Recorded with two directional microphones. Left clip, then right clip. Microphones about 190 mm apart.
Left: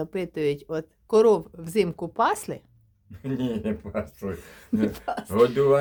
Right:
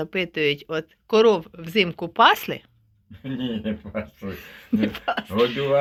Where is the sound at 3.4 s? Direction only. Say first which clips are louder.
Right 1 dB; 35° left (ahead or behind).